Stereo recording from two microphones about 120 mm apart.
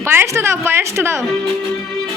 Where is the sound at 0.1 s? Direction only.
20° right (ahead or behind).